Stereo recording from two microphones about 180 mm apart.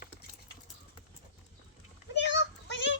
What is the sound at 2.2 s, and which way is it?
Child singing, 80° left.